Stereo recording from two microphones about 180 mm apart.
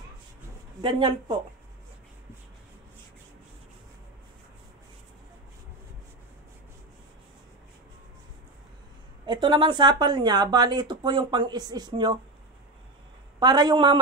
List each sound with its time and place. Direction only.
0.7 s speech: 25° right (ahead or behind)
9.2 s speech: 25° right (ahead or behind)
13.4 s speech: 25° right (ahead or behind)